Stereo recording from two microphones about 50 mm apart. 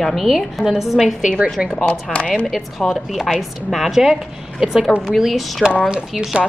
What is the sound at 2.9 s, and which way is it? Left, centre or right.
A woman's voice, centre.